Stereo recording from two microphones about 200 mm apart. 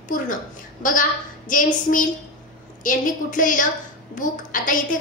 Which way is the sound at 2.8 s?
40° left (ahead or behind).